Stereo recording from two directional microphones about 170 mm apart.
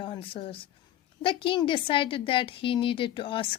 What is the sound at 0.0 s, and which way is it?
A woman's voice, 30° left (ahead or behind).